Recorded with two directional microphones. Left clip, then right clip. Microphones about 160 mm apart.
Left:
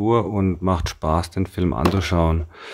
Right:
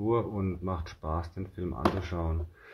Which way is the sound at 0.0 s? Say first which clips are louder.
Left 10 dB; 50° left (ahead or behind).